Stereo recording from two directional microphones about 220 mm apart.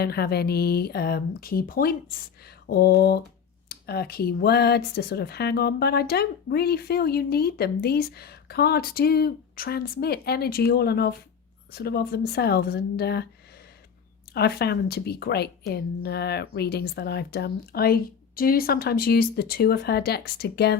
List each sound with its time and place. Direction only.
0.0 s speech: 45° left (ahead or behind)
14.3 s speech: 45° left (ahead or behind)